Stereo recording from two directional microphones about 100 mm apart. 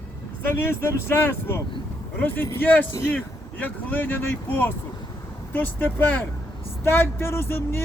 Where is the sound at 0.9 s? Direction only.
25° left (ahead or behind).